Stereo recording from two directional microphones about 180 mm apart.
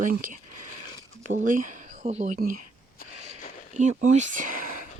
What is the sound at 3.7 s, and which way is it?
Speech, 40° right (ahead or behind).